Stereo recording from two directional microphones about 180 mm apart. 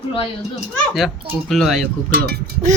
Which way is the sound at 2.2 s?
50° right (ahead or behind).